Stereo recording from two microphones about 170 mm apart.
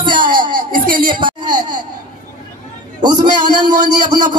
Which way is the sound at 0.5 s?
55° right (ahead or behind).